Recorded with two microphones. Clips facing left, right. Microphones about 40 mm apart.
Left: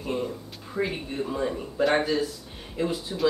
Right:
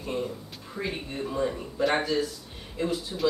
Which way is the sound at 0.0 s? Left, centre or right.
Centre.